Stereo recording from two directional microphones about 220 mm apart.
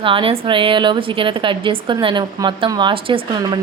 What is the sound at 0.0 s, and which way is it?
A woman's voice, 25° right (ahead or behind).